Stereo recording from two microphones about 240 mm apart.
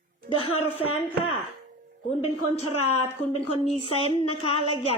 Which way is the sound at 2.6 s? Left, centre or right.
Left.